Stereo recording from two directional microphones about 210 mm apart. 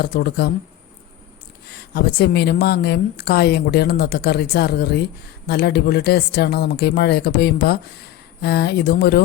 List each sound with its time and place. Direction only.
0.0 s speech: 50° left (ahead or behind)
1.7 s speech: 50° left (ahead or behind)